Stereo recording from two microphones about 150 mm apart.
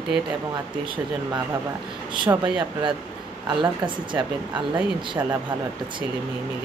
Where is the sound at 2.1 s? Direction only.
30° right (ahead or behind).